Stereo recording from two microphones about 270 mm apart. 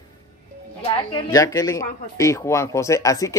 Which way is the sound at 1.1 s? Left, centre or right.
Centre.